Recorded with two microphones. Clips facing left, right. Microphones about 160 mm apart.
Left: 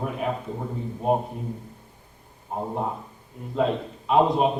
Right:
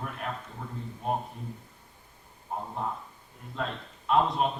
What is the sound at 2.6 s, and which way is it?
Speech, 35° left (ahead or behind).